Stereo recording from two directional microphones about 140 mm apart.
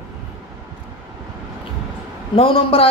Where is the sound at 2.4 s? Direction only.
40° left (ahead or behind).